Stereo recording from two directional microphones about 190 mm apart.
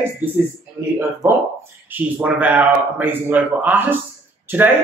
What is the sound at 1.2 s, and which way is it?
Speech, centre (ahead or behind).